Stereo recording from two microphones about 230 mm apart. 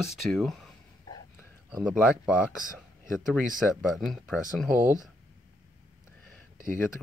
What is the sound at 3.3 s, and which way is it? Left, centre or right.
Speech, centre.